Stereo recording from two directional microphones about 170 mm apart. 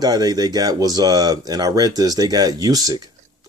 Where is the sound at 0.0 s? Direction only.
20° right (ahead or behind).